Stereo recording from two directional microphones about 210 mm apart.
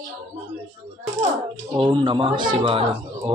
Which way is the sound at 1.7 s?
20° right (ahead or behind).